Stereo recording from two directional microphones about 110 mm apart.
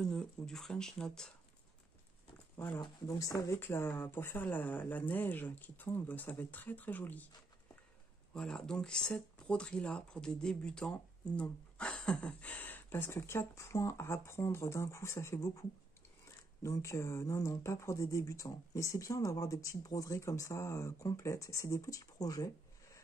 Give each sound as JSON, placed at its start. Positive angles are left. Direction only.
{"t": 0.0, "sound": "speech", "side_deg": 5}
{"t": 2.5, "sound": "speech", "side_deg": 20}
{"t": 2.8, "sound": "speech", "side_deg": 30}
{"t": 8.3, "sound": "speech", "side_deg": 5}
{"t": 16.6, "sound": "speech", "side_deg": 30}